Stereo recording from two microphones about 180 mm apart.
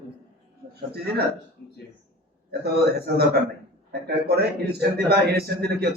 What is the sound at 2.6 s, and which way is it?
A man's voice, 60° right (ahead or behind).